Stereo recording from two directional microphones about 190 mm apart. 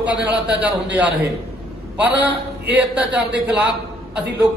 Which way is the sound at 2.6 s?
10° right (ahead or behind).